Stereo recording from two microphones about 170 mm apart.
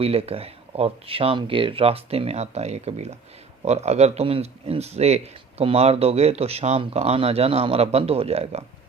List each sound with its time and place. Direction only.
0.0 s speech: 35° right (ahead or behind)